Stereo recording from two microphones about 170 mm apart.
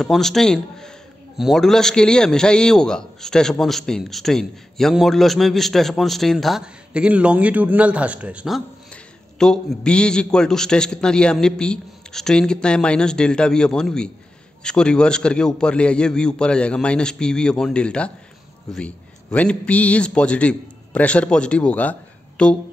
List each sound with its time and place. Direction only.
0.0 s a man's voice: centre (ahead or behind)